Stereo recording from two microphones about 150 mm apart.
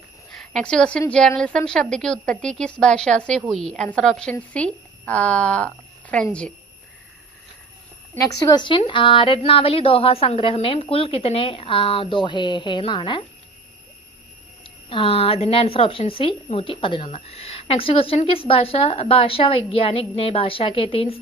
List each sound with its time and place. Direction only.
0.3 s a woman's voice: 5° left (ahead or behind)
8.2 s a woman's voice: 25° left (ahead or behind)
14.6 s a woman's voice: 35° left (ahead or behind)